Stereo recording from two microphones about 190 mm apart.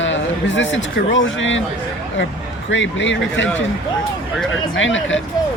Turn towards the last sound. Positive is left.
turn(degrees=80)